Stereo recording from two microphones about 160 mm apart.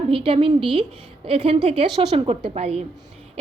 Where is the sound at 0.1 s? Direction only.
35° right (ahead or behind).